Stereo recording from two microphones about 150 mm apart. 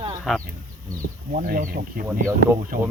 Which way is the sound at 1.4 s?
75° right (ahead or behind).